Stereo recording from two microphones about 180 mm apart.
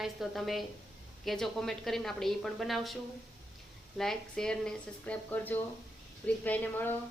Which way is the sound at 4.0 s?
5° left (ahead or behind).